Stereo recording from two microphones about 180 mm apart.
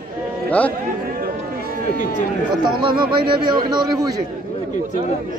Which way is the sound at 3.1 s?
25° right (ahead or behind).